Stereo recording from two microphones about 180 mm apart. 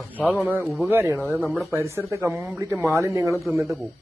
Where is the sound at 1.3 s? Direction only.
Centre (ahead or behind).